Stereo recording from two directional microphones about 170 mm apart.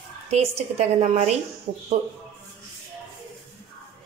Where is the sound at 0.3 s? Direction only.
40° right (ahead or behind).